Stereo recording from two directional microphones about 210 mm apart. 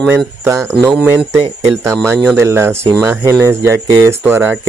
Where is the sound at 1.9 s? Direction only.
5° left (ahead or behind).